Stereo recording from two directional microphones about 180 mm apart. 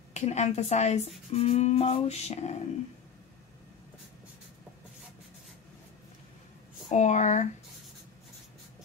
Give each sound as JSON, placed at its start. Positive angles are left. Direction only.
{"t": 0.1, "sound": "speech", "side_deg": 40}
{"t": 6.9, "sound": "speech", "side_deg": 40}